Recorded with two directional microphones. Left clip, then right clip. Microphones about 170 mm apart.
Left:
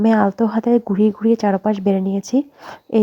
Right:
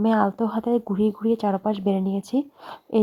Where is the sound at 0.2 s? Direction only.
25° left (ahead or behind).